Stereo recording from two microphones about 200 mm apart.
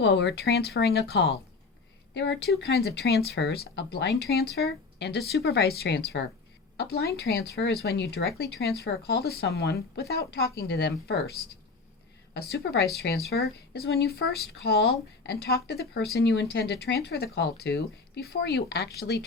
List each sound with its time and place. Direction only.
0.0 s speech: 55° left (ahead or behind)
12.3 s speech: 55° left (ahead or behind)